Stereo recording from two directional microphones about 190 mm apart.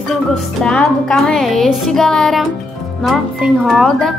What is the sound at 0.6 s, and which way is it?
A woman's voice, 5° left (ahead or behind).